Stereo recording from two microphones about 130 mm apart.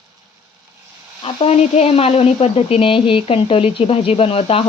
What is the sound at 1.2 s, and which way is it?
Speech, 45° left (ahead or behind).